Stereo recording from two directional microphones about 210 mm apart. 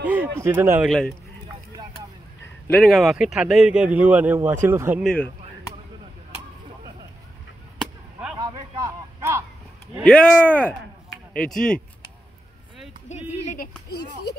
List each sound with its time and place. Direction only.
0.0 s speech: 5° right (ahead or behind)
2.7 s speech: centre (ahead or behind)
5.0 s speech: 5° left (ahead or behind)
7.8 s whip: 5° right (ahead or behind)
8.4 s a sound: 15° right (ahead or behind)
10.0 s speech: 5° left (ahead or behind)
13.5 s speech: 45° left (ahead or behind)